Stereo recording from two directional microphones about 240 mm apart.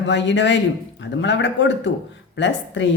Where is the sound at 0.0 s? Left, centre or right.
Left.